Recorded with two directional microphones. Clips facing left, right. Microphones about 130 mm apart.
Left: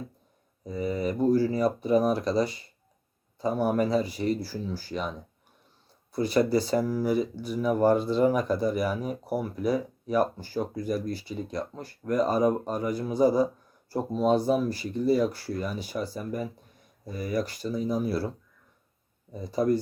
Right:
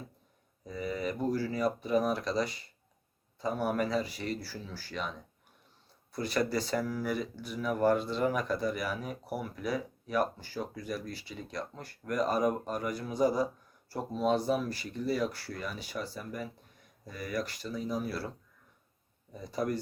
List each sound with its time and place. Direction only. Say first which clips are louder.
0.7 s speech: left 6 dB; 30° left (ahead or behind)
4.9 s speech: left 4 dB; 25° left (ahead or behind)
6.2 s speech: left 7 dB; 35° left (ahead or behind)
11.7 s speech: left 7 dB; 30° left (ahead or behind)
19.3 s speech: left 7 dB; 30° left (ahead or behind)